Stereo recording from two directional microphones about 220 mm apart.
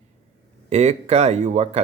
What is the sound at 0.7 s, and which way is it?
Speech, 30° right (ahead or behind).